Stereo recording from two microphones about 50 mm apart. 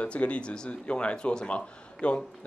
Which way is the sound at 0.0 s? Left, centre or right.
Left.